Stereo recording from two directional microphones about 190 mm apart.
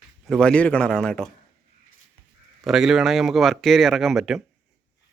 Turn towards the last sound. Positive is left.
turn(degrees=0)  # may be behind; listen again after turning